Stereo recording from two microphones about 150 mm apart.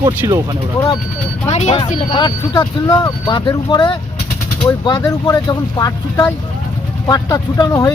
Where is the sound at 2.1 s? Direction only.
25° left (ahead or behind).